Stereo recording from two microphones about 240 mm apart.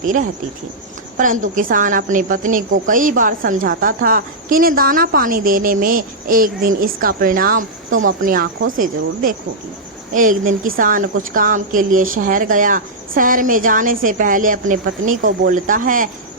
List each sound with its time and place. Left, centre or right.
0.0 s a woman's voice: right
10.1 s a woman's voice: right